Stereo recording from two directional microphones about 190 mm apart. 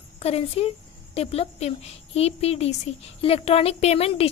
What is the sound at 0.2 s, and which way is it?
A woman's voice, 30° left (ahead or behind).